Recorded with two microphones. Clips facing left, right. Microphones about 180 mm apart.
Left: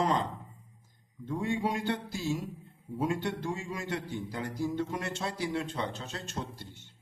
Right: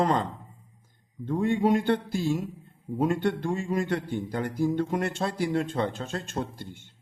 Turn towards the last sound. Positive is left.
turn(degrees=-50)  # may be behind; listen again after turning